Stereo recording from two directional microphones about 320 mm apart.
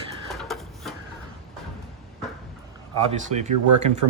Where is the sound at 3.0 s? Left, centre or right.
Right.